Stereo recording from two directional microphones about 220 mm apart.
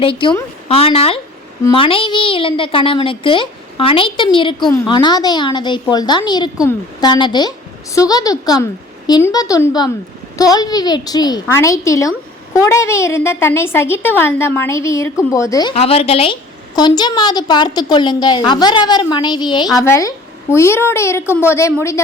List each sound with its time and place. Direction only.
0.0 s a woman's voice: 25° left (ahead or behind)